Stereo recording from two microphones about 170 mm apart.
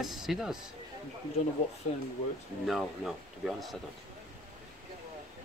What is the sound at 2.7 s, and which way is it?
Speech, centre (ahead or behind).